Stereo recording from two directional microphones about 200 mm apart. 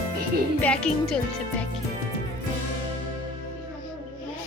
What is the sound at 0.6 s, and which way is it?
Speech, 5° left (ahead or behind).